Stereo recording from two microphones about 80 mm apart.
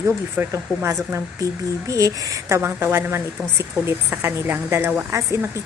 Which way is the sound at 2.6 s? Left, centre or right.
Right.